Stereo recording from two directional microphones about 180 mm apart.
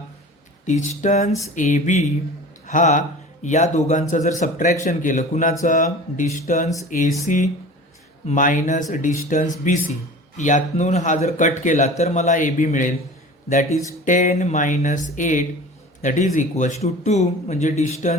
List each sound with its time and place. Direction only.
0.9 s speech: 45° left (ahead or behind)